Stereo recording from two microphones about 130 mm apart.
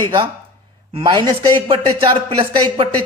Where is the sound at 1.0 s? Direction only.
35° right (ahead or behind).